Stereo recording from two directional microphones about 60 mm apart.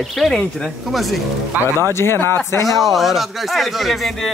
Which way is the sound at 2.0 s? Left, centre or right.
Left.